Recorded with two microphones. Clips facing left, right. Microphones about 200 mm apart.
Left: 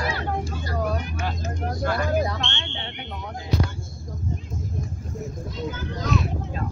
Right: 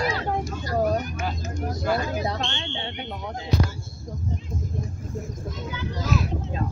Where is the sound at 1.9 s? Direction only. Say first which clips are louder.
Left 2 dB; 30° right (ahead or behind).